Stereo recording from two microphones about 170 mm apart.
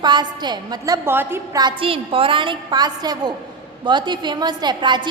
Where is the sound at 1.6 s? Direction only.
30° right (ahead or behind).